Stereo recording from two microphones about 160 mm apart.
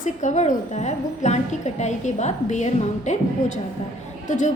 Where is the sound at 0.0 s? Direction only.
50° left (ahead or behind).